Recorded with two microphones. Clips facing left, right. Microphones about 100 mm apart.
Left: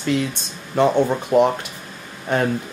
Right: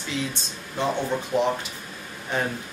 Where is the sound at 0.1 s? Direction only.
60° left (ahead or behind).